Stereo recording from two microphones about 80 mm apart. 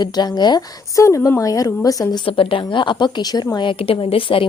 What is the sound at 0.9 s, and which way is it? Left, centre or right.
A woman's voice, left.